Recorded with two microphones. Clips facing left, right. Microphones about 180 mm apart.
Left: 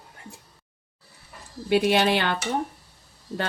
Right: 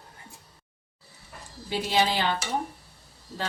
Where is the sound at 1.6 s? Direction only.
65° left (ahead or behind).